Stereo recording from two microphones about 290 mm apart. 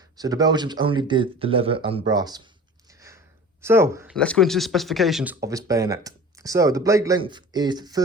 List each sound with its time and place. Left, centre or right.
0.2 s speech: centre
3.6 s speech: centre
4.1 s speech: centre